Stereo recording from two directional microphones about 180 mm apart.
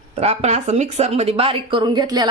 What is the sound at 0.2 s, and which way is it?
A woman's voice, 35° right (ahead or behind).